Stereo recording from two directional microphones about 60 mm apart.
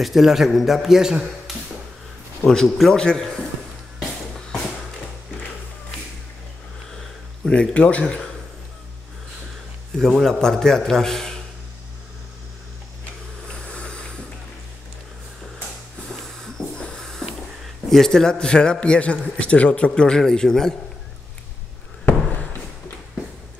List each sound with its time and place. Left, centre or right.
0.0 s a man's voice: centre
2.4 s a man's voice: centre
4.0 s music: centre
6.9 s a sound: centre
7.7 s speech: left
9.9 s a man's voice: centre
13.0 s a sound: centre
15.6 s a sound: centre
17.8 s a man's voice: centre
19.9 s a man's voice: centre